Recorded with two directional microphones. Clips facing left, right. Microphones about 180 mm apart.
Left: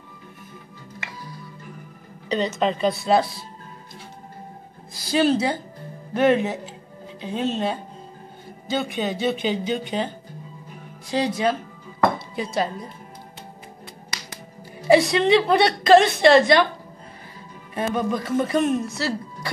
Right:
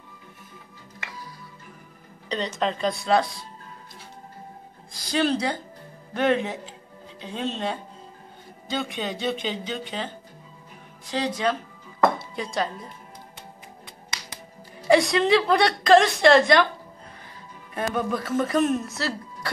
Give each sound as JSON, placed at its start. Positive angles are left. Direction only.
{"t": 2.2, "sound": "a woman's voice", "side_deg": 5}
{"t": 4.9, "sound": "a woman's voice", "side_deg": 5}
{"t": 14.9, "sound": "a woman's voice", "side_deg": 0}
{"t": 17.9, "sound": "a woman's voice", "side_deg": 0}